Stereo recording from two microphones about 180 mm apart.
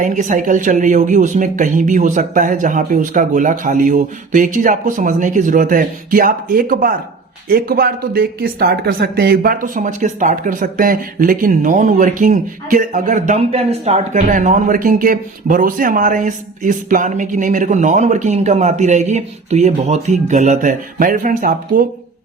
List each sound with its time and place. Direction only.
0.0 s speech: 45° right (ahead or behind)